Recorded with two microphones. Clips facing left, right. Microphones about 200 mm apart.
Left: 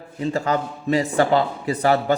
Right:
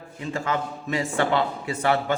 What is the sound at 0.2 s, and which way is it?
A man's voice, 40° left (ahead or behind).